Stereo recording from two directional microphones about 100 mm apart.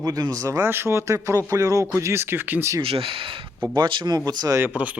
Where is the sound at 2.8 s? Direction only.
70° right (ahead or behind); by 4.5 s 40° right (ahead or behind).